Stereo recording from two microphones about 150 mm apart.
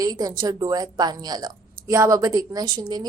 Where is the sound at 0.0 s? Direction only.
25° right (ahead or behind).